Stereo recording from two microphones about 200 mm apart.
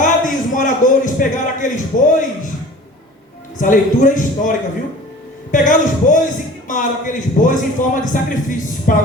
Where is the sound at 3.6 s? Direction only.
40° left (ahead or behind).